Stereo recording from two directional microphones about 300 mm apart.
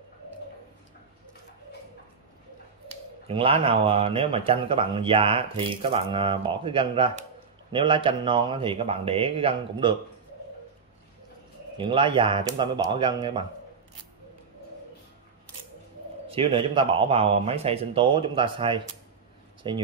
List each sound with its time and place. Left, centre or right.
3.3 s speech: centre
11.7 s speech: centre
16.3 s speech: centre